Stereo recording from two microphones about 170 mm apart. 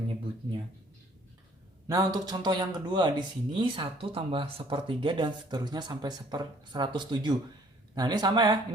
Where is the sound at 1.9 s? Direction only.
20° right (ahead or behind).